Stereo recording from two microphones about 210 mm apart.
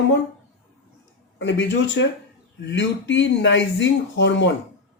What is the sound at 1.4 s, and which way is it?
Speech, 55° left (ahead or behind).